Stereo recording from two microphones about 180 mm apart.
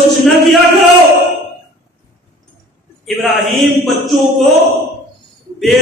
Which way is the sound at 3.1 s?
Centre (ahead or behind).